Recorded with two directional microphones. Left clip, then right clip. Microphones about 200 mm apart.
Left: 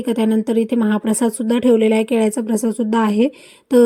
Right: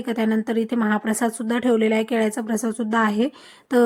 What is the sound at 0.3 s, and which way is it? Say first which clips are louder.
Speech: left 5 dB; 30° left (ahead or behind).